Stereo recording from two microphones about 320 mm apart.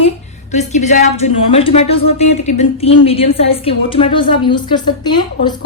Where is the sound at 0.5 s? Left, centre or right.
Left.